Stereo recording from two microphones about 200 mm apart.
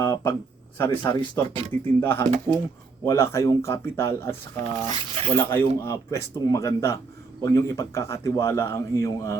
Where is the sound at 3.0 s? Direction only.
15° left (ahead or behind).